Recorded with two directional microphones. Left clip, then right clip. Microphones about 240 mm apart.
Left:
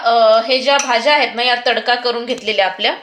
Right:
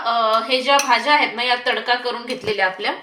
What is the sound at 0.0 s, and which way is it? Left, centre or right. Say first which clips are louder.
Speech: left 7 dB; left.